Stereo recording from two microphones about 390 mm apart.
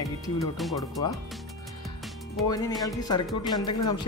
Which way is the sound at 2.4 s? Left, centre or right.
Centre.